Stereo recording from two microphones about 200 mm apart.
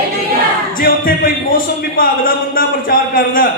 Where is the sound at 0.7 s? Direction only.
45° left (ahead or behind).